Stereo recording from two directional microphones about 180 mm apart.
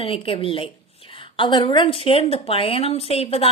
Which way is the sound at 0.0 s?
30° left (ahead or behind).